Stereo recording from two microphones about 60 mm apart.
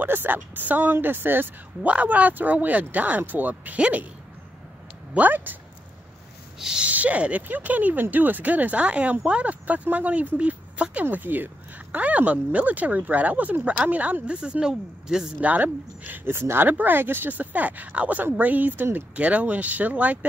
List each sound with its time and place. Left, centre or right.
0.0 s speech: right
1.9 s speech: right
5.1 s speech: right
6.6 s a woman's voice: centre
6.9 s a woman's voice: right
15.4 s speech: right